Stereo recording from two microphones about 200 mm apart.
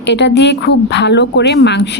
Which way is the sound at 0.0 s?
60° left (ahead or behind).